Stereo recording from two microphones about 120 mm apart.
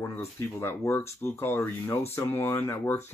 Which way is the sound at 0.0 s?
20° left (ahead or behind).